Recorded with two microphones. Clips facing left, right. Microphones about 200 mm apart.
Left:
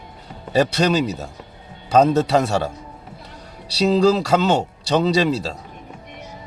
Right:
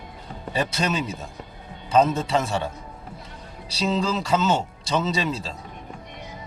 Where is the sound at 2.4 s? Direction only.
75° left (ahead or behind).